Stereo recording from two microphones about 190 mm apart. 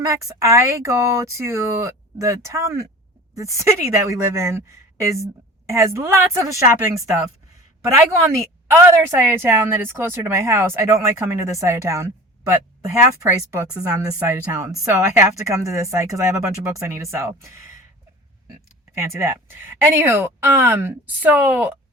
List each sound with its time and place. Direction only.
0.0 s a woman's voice: 15° right (ahead or behind)
8.6 s a woman's voice: 10° right (ahead or behind)
18.9 s a woman's voice: 15° right (ahead or behind)